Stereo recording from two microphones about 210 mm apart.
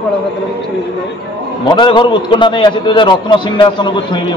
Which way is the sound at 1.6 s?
20° left (ahead or behind).